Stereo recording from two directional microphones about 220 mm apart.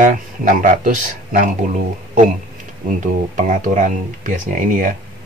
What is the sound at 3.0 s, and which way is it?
Speech, 35° right (ahead or behind).